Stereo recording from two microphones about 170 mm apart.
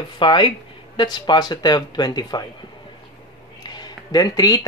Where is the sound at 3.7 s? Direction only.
25° left (ahead or behind).